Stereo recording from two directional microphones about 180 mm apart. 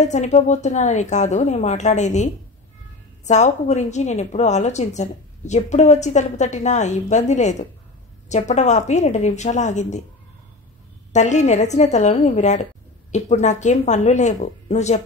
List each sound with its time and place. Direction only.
0.0 s a woman's voice: 40° left (ahead or behind)
11.1 s a woman's voice: 40° left (ahead or behind)